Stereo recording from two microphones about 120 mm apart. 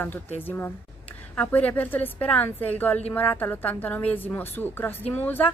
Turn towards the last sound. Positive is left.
turn(degrees=15)  # may be behind; listen again after turning